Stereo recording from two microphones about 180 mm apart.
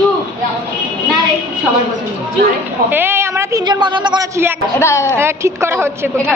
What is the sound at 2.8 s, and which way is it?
A woman's voice, 10° right (ahead or behind).